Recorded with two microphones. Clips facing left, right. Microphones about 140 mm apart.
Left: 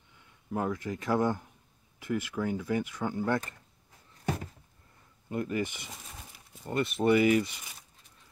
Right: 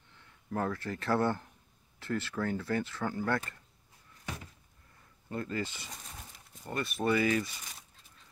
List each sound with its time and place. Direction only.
0.5 s speech: 15° left (ahead or behind)
5.3 s speech: 15° left (ahead or behind)
5.9 s dog: 5° left (ahead or behind)
6.7 s speech: 20° left (ahead or behind)